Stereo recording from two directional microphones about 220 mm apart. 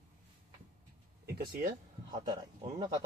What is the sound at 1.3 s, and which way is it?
Speech, 45° right (ahead or behind).